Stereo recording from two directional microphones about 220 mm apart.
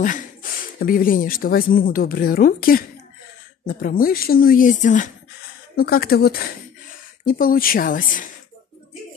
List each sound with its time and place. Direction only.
0.0 s speech: 35° left (ahead or behind)